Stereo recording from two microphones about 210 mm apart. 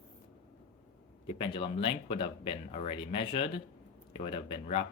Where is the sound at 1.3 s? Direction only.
25° left (ahead or behind).